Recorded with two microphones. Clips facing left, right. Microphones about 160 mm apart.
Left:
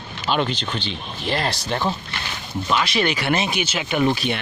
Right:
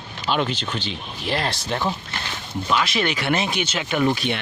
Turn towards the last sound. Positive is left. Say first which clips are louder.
# left 1 dB
turn(degrees=5)  # may be behind; listen again after turning